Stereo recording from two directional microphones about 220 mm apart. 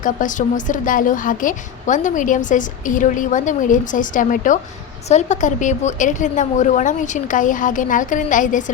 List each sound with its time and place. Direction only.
0.0 s a woman's voice: 35° left (ahead or behind)